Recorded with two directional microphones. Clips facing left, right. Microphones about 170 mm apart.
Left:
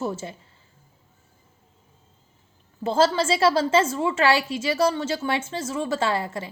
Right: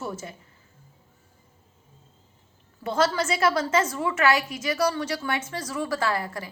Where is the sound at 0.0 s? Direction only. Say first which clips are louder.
Left 5 dB; 25° left (ahead or behind).